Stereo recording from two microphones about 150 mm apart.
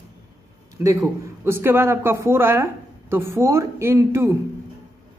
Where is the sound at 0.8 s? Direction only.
20° right (ahead or behind).